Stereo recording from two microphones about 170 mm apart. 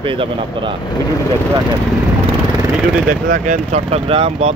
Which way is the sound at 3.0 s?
50° right (ahead or behind).